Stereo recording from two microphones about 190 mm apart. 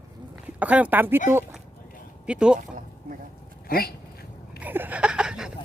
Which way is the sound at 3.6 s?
50° left (ahead or behind).